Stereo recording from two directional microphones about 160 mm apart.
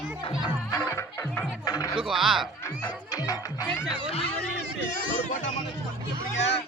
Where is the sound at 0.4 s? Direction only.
25° left (ahead or behind).